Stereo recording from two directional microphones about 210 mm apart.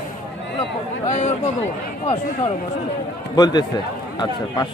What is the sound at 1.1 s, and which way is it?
Speech, 35° left (ahead or behind).